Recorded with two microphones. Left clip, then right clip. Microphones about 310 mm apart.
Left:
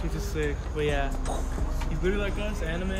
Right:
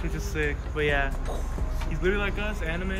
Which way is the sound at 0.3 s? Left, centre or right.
Centre.